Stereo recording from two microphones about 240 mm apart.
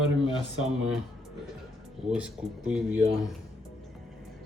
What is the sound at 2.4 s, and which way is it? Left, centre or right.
Speech, centre.